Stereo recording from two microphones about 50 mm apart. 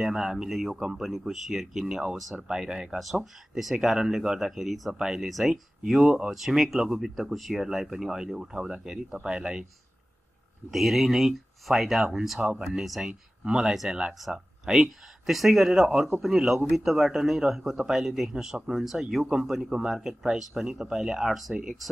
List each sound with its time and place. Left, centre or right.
0.0 s speech: centre
10.7 s speech: centre
13.1 s speech: centre
14.2 s speech: centre